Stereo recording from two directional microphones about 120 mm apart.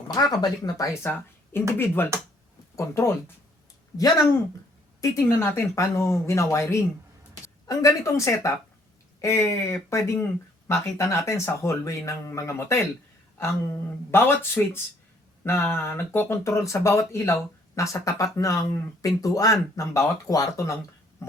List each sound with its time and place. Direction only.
0.1 s speech: 30° left (ahead or behind)
1.8 s speech: 20° left (ahead or behind)
4.9 s speech: 25° left (ahead or behind)
21.2 s a sound: 25° left (ahead or behind)